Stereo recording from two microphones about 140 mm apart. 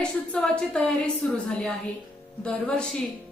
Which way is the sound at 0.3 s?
5° left (ahead or behind).